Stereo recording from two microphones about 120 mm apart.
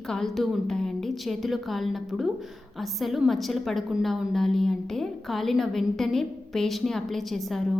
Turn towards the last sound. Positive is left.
turn(degrees=0)  # may be behind; listen again after turning